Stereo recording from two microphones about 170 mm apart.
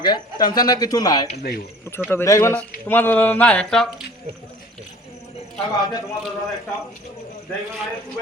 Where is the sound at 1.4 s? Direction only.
65° left (ahead or behind).